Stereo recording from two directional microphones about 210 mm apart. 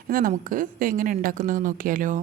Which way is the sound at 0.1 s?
40° right (ahead or behind).